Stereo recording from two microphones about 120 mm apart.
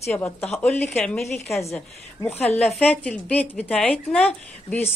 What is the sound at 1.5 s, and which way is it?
Speech, 25° left (ahead or behind).